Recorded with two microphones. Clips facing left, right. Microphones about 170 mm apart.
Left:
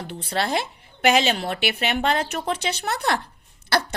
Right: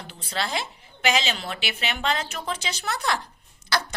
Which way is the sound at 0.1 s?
60° left (ahead or behind).